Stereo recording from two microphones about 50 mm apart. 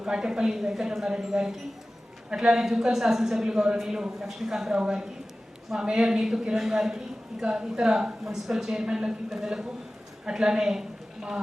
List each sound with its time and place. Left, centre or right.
0.0 s a man's voice: centre